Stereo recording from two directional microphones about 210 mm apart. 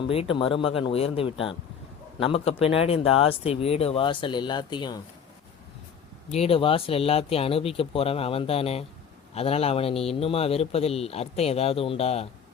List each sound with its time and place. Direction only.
0.1 s a man's voice: 25° left (ahead or behind)
6.3 s a man's voice: 30° left (ahead or behind)